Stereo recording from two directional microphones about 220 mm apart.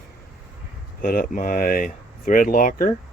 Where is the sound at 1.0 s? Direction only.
40° left (ahead or behind).